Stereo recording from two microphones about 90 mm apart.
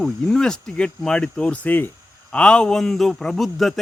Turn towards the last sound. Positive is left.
turn(degrees=0)  # may be behind; listen again after turning